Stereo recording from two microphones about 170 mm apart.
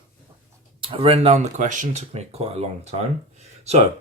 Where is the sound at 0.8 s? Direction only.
35° right (ahead or behind).